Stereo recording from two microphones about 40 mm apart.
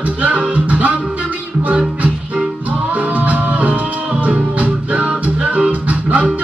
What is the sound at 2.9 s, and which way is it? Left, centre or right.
Music, right.